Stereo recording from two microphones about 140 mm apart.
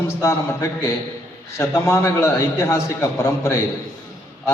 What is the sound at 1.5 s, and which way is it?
A man's voice, 20° left (ahead or behind).